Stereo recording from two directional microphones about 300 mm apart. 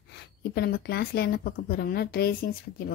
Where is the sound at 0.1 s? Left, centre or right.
Left.